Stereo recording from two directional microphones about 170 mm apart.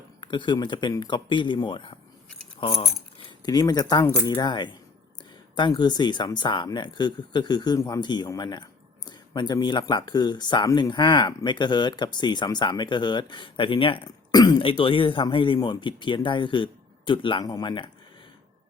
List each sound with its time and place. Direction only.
0.2 s speech: 25° left (ahead or behind)